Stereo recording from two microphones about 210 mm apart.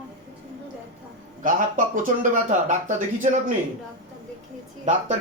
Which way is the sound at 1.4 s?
40° right (ahead or behind).